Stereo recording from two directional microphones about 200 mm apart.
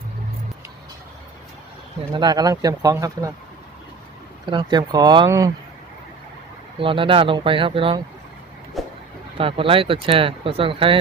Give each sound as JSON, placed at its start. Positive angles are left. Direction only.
{"t": 2.1, "sound": "speech", "side_deg": -20}
{"t": 4.4, "sound": "speech", "side_deg": -20}
{"t": 6.7, "sound": "speech", "side_deg": -25}
{"t": 8.8, "sound": "vehicle", "side_deg": 0}
{"t": 9.4, "sound": "speech", "side_deg": -25}